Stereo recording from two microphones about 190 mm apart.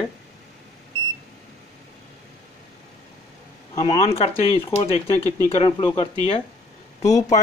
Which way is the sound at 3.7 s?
25° left (ahead or behind).